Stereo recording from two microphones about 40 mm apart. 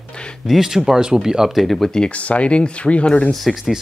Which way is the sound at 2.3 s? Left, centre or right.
Left.